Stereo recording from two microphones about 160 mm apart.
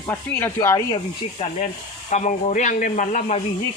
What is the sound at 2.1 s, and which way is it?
Speech, 50° left (ahead or behind).